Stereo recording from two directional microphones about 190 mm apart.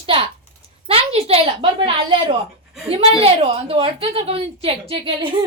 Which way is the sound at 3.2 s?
30° right (ahead or behind).